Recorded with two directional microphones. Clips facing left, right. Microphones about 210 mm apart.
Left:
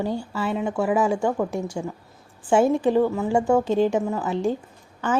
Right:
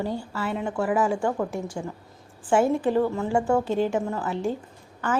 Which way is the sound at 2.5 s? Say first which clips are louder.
Left 3 dB; 15° left (ahead or behind).